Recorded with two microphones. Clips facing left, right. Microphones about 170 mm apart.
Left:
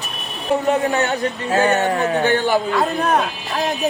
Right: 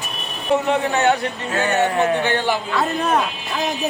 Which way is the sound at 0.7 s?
45° left (ahead or behind).